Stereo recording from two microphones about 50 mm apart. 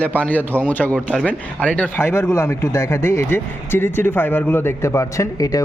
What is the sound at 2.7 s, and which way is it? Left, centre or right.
Speech, left.